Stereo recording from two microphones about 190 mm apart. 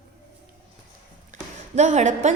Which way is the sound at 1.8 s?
40° right (ahead or behind).